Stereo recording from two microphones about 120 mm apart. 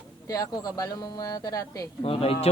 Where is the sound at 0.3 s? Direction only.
30° left (ahead or behind).